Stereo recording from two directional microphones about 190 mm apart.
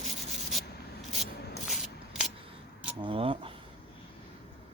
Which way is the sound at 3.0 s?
30° right (ahead or behind).